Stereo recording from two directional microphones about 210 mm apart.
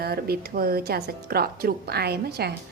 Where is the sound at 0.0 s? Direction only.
45° right (ahead or behind).